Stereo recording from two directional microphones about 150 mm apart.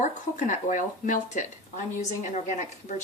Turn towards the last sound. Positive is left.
turn(degrees=50)  # may be behind; listen again after turning